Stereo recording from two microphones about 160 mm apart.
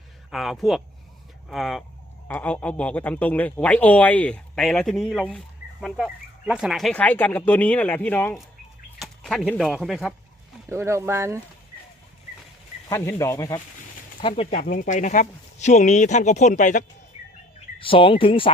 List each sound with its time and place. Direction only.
0.3 s speech: centre (ahead or behind)
10.7 s speech: 15° right (ahead or behind)
12.9 s speech: 20° left (ahead or behind)
14.2 s speech: 35° left (ahead or behind)
14.6 s speech: 60° left (ahead or behind)
17.7 s speech: 35° left (ahead or behind)